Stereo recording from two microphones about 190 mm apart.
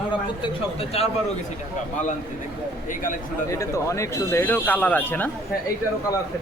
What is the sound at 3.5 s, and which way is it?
Speech, 15° left (ahead or behind).